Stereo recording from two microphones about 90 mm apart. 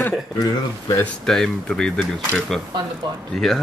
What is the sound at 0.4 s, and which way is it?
Speech, 40° left (ahead or behind).